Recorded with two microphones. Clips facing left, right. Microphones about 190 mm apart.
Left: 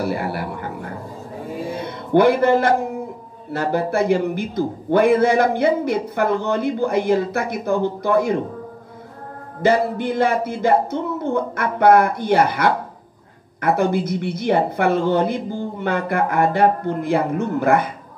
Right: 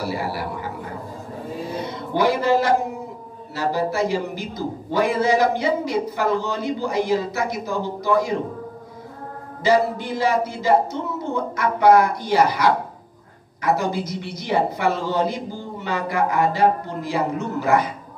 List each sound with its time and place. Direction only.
0.1 s a man's voice: 55° left (ahead or behind)
1.8 s a sound: 55° left (ahead or behind)
3.5 s a man's voice: 55° left (ahead or behind)
9.6 s a man's voice: 55° left (ahead or behind)